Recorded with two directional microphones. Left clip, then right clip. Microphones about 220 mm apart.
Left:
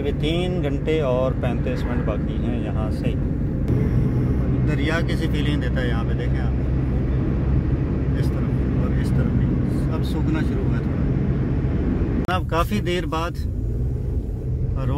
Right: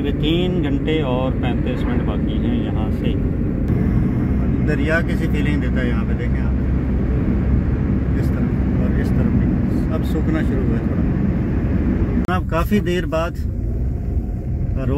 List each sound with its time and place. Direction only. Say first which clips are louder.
0.0 s speech: right 4 dB; 45° left (ahead or behind)
4.8 s speech: right 4 dB; centre (ahead or behind)
12.2 s speech: even; 10° left (ahead or behind)